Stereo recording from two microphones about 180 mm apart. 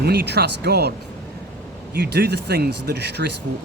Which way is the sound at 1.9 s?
65° right (ahead or behind).